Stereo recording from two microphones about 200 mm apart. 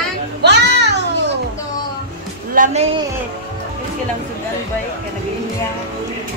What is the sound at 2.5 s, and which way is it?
Music, 40° right (ahead or behind).